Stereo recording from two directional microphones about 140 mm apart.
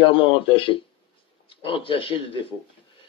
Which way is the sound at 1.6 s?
40° left (ahead or behind).